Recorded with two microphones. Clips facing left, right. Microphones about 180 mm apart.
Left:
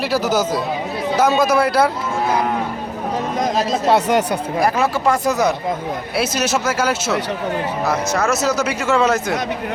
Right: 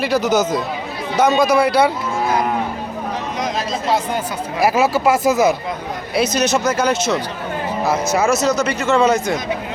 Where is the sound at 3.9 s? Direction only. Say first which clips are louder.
Left 4 dB; 75° left (ahead or behind).